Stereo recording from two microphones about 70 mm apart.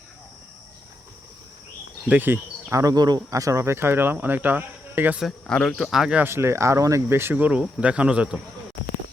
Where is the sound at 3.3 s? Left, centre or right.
Right.